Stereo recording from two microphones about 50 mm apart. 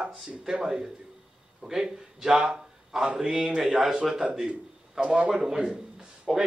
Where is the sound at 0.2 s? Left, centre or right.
Centre.